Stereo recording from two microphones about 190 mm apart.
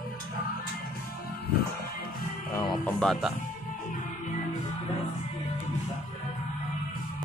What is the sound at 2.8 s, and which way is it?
Music, centre (ahead or behind).